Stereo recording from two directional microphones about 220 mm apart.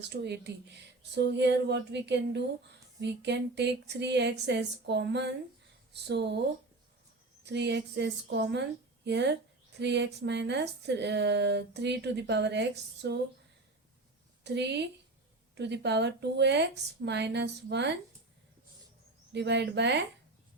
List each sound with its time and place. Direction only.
0.1 s speech: 50° right (ahead or behind)
7.4 s speech: 50° right (ahead or behind)
14.4 s speech: 50° right (ahead or behind)
19.3 s speech: 50° right (ahead or behind)